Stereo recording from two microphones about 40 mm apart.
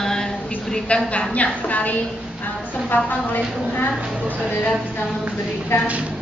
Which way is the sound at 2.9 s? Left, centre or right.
Left.